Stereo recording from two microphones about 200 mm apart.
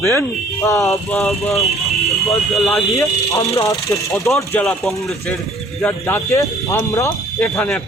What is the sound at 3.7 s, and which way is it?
Speech, 15° left (ahead or behind).